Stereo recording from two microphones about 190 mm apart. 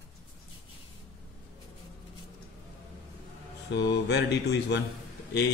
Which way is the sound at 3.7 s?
60° left (ahead or behind).